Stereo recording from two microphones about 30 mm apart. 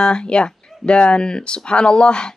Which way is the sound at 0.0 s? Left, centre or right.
Left.